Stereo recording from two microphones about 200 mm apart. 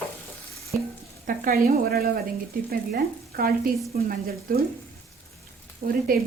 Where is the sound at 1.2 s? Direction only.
45° right (ahead or behind).